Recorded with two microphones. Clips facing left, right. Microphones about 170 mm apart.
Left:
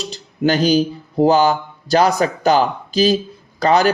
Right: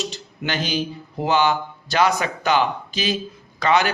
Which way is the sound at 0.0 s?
35° left (ahead or behind).